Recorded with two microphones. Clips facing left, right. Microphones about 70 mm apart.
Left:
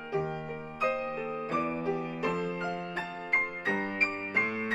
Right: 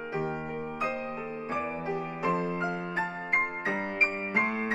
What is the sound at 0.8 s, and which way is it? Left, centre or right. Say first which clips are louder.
Music: left 4 dB; right.